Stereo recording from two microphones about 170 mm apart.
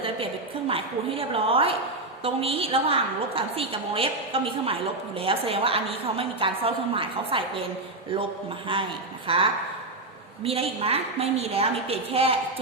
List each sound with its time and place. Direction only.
0.7 s a woman's voice: 35° right (ahead or behind)
8.6 s a woman's voice: 30° right (ahead or behind)